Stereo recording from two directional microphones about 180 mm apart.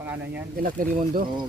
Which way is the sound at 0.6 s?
50° right (ahead or behind).